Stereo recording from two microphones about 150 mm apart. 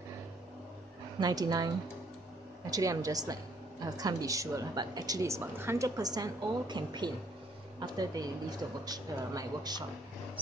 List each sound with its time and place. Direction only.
1.2 s a woman's voice: 25° right (ahead or behind)